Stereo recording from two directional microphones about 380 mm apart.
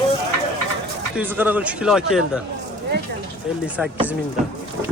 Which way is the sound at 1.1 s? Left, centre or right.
Centre.